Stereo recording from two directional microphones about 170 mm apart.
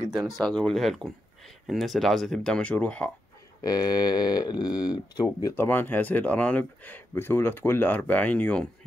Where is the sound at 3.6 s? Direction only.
20° left (ahead or behind).